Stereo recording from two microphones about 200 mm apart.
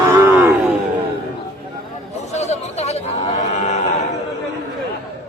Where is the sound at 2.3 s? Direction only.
35° left (ahead or behind).